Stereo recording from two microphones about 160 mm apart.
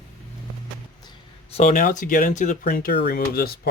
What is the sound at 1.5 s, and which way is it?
Speech, 50° left (ahead or behind).